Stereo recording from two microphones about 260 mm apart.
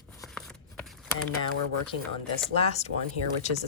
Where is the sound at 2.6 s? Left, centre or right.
Left.